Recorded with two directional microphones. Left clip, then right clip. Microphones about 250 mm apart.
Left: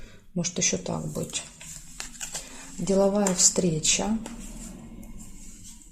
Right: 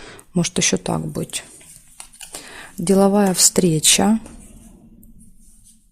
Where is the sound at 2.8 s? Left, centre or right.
Right.